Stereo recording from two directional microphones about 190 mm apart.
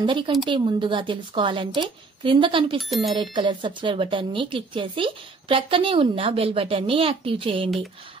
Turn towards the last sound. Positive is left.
turn(degrees=-30)  # may be behind; listen again after turning